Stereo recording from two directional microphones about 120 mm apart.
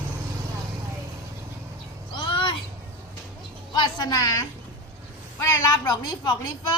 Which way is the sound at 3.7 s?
35° left (ahead or behind).